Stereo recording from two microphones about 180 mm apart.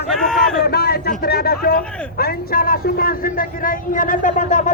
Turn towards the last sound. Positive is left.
turn(degrees=45)  # may be behind; listen again after turning